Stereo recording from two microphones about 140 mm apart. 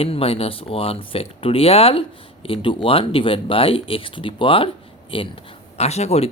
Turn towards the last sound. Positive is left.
turn(degrees=50)  # may be behind; listen again after turning